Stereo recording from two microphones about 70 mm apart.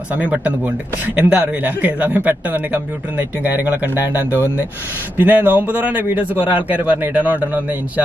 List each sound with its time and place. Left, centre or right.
0.1 s a man's voice: right